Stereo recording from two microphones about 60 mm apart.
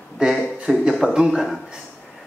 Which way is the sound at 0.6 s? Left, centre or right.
Centre.